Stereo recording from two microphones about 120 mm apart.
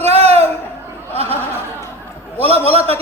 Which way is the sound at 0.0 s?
65° right (ahead or behind).